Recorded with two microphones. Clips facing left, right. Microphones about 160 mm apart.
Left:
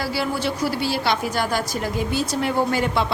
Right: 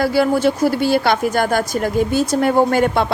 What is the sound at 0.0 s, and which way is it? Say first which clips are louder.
A woman's voice: right 9 dB; 50° right (ahead or behind).